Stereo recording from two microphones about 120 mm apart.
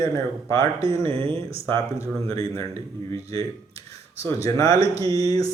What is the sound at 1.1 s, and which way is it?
Speech, 45° right (ahead or behind).